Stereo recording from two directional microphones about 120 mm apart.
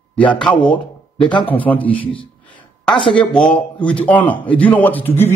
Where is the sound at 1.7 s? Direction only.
10° left (ahead or behind).